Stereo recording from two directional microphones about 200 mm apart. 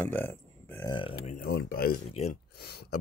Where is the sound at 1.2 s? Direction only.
45° left (ahead or behind).